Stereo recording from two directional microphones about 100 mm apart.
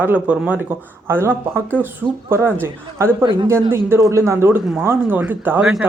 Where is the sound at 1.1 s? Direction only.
25° right (ahead or behind).